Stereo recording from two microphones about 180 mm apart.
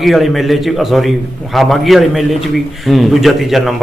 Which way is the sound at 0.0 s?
Centre (ahead or behind).